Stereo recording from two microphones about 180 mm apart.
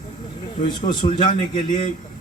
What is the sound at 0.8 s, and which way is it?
Speech, 45° left (ahead or behind).